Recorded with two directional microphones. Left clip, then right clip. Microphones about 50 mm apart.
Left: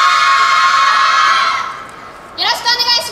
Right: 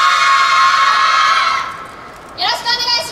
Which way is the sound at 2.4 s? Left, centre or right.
Left.